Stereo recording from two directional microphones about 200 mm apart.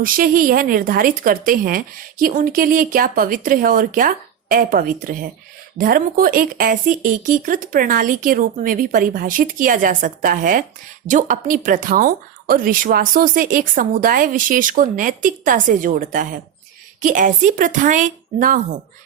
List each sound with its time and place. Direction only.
0.0 s a woman's voice: 45° right (ahead or behind)